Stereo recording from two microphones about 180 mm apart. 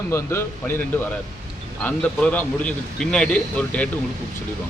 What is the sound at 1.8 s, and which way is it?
Speech, 10° left (ahead or behind).